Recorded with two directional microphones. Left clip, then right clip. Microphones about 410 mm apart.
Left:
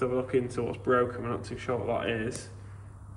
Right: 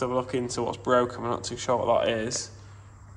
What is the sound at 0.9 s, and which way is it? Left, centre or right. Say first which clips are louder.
Speech: right 3 dB; right.